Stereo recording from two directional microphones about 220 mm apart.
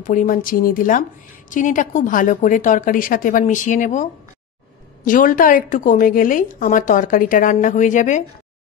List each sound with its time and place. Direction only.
0.0 s a woman's voice: 35° left (ahead or behind)